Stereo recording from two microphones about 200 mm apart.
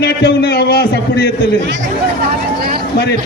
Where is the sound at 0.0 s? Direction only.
55° left (ahead or behind).